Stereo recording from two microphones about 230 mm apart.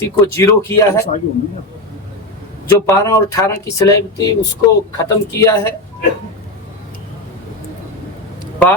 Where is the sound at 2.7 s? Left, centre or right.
Centre.